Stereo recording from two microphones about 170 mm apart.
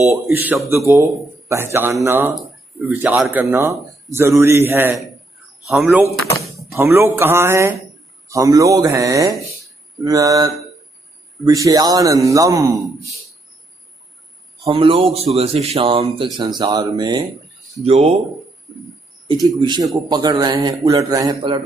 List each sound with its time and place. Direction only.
0.3 s speech: 10° right (ahead or behind)
5.7 s speech: centre (ahead or behind)
6.7 s speech: 15° right (ahead or behind)
14.7 s speech: 30° right (ahead or behind)
17.8 s speech: 35° right (ahead or behind)
19.5 s speech: 25° right (ahead or behind)